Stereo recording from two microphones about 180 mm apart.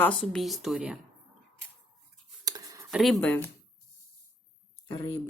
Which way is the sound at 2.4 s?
20° right (ahead or behind).